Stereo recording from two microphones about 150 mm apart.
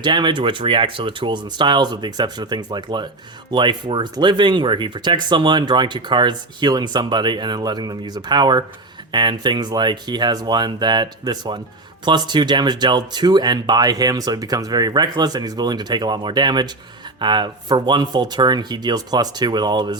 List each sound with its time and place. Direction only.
0.0 s speech: 30° right (ahead or behind)